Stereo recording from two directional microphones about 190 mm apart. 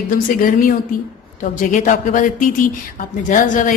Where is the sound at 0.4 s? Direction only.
45° left (ahead or behind).